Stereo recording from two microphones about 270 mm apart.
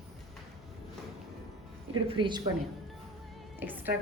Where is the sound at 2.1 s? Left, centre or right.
Centre.